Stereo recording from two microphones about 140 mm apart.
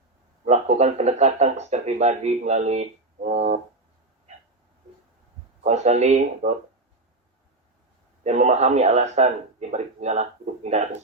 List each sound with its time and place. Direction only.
0.4 s a man's voice: 55° right (ahead or behind)
5.6 s speech: 55° right (ahead or behind)
8.2 s a man's voice: 55° right (ahead or behind)